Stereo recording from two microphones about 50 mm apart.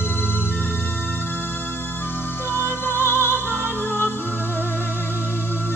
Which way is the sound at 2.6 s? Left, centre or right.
Left.